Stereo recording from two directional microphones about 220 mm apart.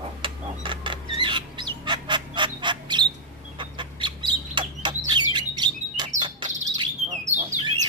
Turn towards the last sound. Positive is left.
turn(degrees=-30)  # may be behind; listen again after turning